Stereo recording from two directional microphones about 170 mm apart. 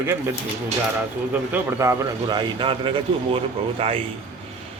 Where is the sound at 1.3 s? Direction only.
10° right (ahead or behind).